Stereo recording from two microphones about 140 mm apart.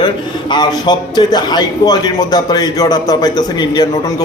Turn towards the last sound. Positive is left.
turn(degrees=30)  # may be behind; listen again after turning